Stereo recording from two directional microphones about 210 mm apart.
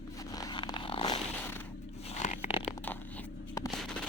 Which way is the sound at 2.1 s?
30° left (ahead or behind).